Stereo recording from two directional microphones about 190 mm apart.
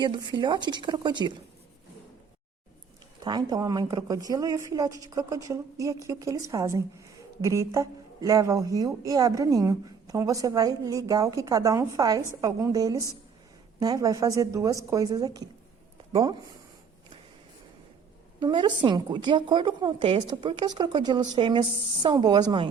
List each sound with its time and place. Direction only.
0.0 s a woman's voice: 25° right (ahead or behind)
3.2 s a woman's voice: 20° right (ahead or behind)
18.3 s a woman's voice: 25° right (ahead or behind)